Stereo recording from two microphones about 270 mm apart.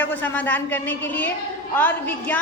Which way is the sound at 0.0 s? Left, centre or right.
Centre.